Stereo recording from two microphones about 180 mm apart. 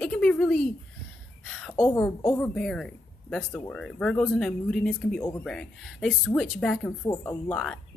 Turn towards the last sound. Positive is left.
turn(degrees=5)  # may be behind; listen again after turning